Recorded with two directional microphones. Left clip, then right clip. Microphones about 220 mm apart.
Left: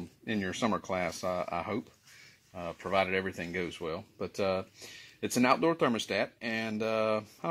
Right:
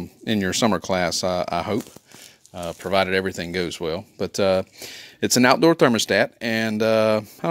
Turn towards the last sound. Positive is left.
turn(degrees=-50)  # may be behind; listen again after turning